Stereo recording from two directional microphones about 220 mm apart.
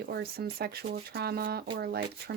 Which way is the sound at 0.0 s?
45° right (ahead or behind).